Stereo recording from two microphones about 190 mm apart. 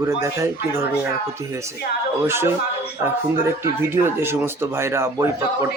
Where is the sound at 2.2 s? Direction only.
10° right (ahead or behind).